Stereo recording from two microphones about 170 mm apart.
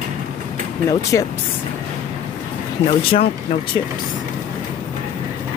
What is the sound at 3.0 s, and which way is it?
Speech, 30° left (ahead or behind).